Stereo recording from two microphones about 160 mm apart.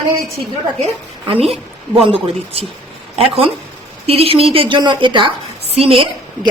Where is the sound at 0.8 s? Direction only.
35° right (ahead or behind).